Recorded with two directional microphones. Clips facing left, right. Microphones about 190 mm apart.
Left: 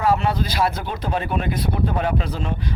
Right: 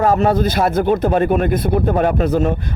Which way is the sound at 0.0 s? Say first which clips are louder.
Right 6 dB; 45° right (ahead or behind).